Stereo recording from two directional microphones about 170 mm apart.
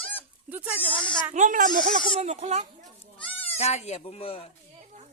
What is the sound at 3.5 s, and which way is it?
Speech, 40° left (ahead or behind).